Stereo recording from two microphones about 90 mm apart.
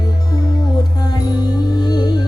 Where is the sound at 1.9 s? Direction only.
50° left (ahead or behind).